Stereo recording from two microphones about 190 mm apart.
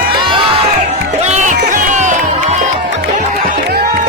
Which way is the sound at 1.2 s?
40° right (ahead or behind).